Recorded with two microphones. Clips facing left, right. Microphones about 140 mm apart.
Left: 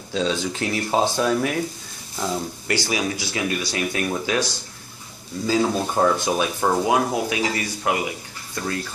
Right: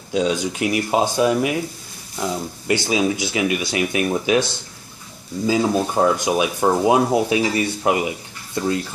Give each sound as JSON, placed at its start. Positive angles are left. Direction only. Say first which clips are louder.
{"t": 0.1, "sound": "speech", "louder": "right 3 dB", "side_deg": -15}
{"t": 2.7, "sound": "speech", "louder": "right 5 dB", "side_deg": -20}
{"t": 5.5, "sound": "speech", "louder": "right 2 dB", "side_deg": -15}